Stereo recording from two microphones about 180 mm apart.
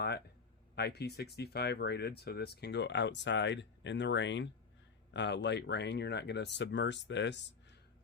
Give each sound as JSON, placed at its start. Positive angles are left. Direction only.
{"t": 0.8, "sound": "speech", "side_deg": 65}